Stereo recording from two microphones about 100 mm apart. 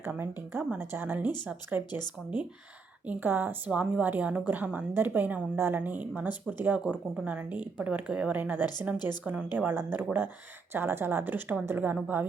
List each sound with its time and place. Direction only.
0.0 s speech: 20° right (ahead or behind)
3.1 s a woman's voice: 20° right (ahead or behind)
9.5 s speech: 20° right (ahead or behind)